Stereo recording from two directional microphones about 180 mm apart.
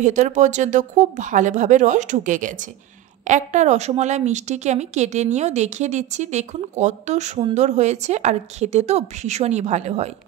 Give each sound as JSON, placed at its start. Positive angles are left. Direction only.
{"t": 0.0, "sound": "a woman's voice", "side_deg": -45}